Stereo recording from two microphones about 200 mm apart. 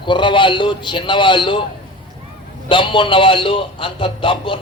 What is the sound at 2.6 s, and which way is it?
A man's voice, 25° left (ahead or behind).